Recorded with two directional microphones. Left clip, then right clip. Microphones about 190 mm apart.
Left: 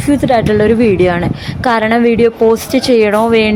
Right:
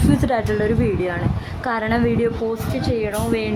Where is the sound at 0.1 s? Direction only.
25° left (ahead or behind).